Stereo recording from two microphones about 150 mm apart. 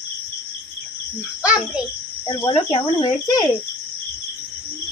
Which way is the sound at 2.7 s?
25° left (ahead or behind).